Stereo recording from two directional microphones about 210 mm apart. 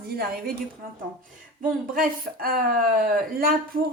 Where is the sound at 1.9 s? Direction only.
45° right (ahead or behind).